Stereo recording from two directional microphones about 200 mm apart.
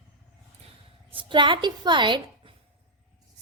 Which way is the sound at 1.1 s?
25° right (ahead or behind).